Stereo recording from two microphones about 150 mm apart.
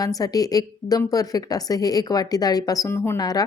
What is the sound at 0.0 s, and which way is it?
Speech, 25° left (ahead or behind).